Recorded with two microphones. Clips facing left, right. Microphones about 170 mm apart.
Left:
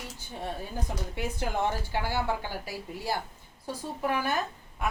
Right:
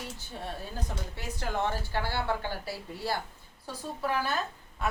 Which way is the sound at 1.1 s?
15° left (ahead or behind).